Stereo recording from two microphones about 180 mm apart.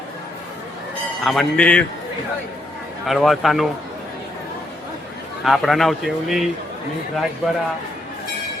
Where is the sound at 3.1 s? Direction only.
Centre (ahead or behind).